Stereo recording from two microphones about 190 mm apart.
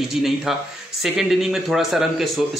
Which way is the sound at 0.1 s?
Centre (ahead or behind).